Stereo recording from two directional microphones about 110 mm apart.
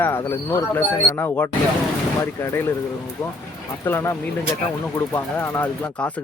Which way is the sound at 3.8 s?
20° left (ahead or behind).